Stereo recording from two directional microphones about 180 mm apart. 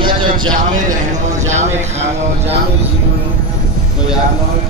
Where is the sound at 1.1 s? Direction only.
40° right (ahead or behind).